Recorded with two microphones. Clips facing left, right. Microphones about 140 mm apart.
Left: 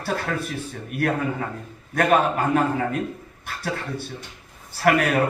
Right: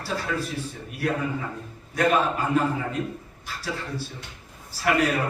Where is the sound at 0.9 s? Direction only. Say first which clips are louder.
Left 4 dB; 55° left (ahead or behind).